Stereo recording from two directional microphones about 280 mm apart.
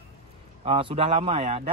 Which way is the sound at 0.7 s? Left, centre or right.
Centre.